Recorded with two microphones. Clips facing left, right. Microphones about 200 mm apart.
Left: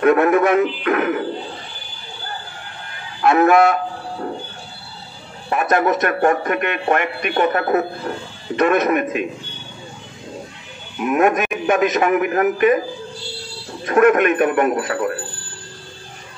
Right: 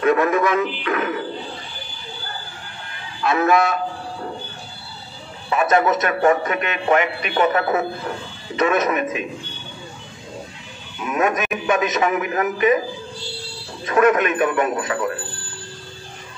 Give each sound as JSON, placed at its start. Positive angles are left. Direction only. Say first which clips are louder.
{"t": 0.0, "sound": "a man's voice", "louder": "left 3 dB", "side_deg": 60}
{"t": 3.2, "sound": "a sound", "louder": "left 5 dB", "side_deg": 60}
{"t": 5.5, "sound": "a man's voice", "louder": "even", "side_deg": 55}
{"t": 11.0, "sound": "a man's voice", "louder": "left 5 dB", "side_deg": 60}
{"t": 13.8, "sound": "a man's voice", "louder": "left 3 dB", "side_deg": 55}